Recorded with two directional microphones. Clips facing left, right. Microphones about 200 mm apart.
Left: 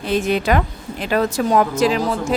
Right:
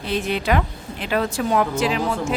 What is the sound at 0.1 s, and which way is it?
Speech, 45° left (ahead or behind).